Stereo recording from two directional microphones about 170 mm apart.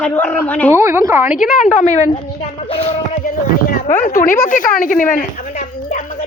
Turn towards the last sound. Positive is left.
turn(degrees=55)  # may be behind; listen again after turning